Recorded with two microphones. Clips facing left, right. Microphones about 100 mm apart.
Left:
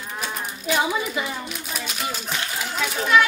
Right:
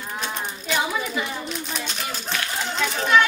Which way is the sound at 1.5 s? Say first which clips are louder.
Right 2 dB; 5° left (ahead or behind).